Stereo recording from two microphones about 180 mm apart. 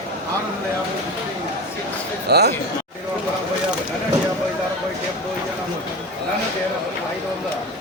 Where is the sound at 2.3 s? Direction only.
65° right (ahead or behind).